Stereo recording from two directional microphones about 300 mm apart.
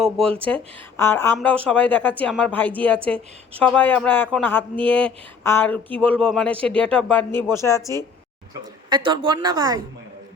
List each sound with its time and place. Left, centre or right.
0.4 s speech: centre
8.9 s a woman's voice: centre